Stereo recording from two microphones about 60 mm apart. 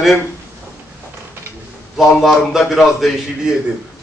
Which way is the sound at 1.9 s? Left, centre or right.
Centre.